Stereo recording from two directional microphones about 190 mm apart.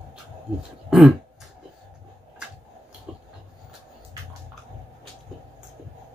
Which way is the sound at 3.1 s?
5° right (ahead or behind).